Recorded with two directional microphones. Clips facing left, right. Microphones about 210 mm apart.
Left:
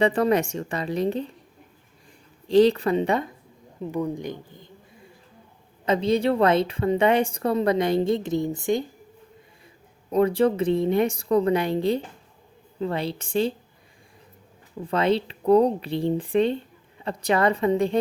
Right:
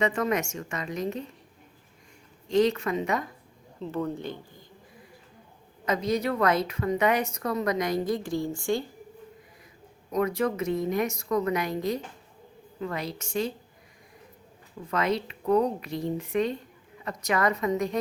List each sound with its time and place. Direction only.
0.0 s speech: 35° left (ahead or behind)
2.5 s speech: 35° left (ahead or behind)
3.8 s speech: 15° left (ahead or behind)
10.1 s speech: 30° left (ahead or behind)
14.8 s speech: 30° left (ahead or behind)